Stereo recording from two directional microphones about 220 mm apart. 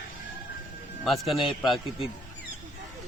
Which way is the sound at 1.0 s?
Centre (ahead or behind).